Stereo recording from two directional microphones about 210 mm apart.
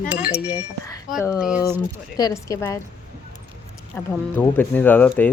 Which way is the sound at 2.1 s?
15° left (ahead or behind).